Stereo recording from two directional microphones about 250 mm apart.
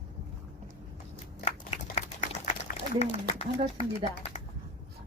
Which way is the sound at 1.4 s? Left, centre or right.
Left.